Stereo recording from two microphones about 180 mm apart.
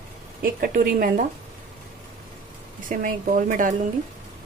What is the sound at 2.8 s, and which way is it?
Speech, 50° right (ahead or behind).